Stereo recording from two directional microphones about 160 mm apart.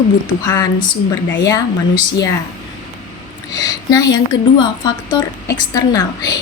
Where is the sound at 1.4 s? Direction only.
20° left (ahead or behind).